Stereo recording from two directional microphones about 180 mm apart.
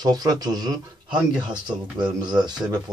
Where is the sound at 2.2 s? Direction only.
25° right (ahead or behind).